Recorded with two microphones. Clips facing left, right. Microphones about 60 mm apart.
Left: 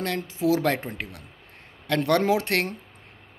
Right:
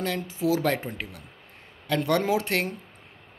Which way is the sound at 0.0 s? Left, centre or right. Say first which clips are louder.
Left 2 dB; left.